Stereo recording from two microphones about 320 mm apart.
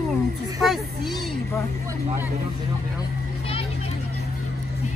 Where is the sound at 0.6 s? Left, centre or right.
Centre.